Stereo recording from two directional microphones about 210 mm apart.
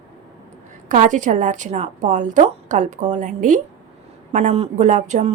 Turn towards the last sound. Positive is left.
turn(degrees=-35)  # may be behind; listen again after turning